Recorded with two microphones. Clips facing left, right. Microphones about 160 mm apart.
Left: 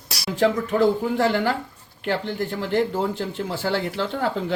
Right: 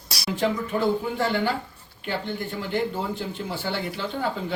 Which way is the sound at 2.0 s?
90° left.